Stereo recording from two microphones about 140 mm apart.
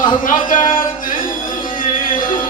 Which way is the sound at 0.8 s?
75° left (ahead or behind).